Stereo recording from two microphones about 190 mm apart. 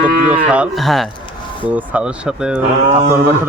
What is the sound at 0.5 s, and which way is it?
Speech, 5° right (ahead or behind).